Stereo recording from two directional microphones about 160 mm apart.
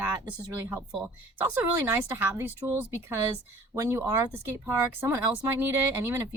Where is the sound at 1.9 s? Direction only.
15° right (ahead or behind).